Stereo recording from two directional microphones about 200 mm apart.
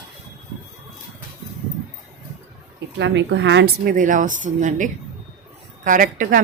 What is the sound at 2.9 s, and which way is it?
A woman's voice, 65° right (ahead or behind).